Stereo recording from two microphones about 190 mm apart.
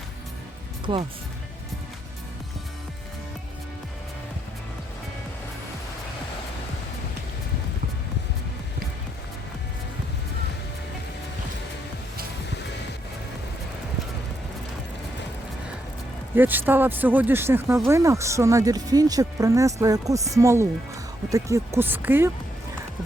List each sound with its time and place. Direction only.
16.3 s speech: 10° right (ahead or behind)